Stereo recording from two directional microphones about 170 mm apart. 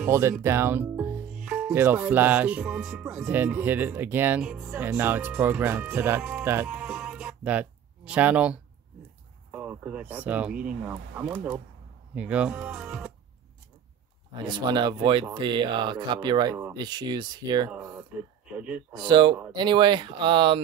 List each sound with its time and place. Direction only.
0.0 s speech: 15° right (ahead or behind)
14.4 s speech: 25° right (ahead or behind)
17.6 s speech: 10° right (ahead or behind)
19.0 s speech: 30° right (ahead or behind)